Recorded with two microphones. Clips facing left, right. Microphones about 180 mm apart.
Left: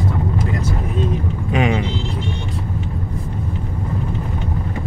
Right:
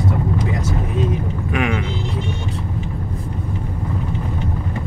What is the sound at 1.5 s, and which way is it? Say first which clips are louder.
Vehicle: left 3 dB; 25° left (ahead or behind).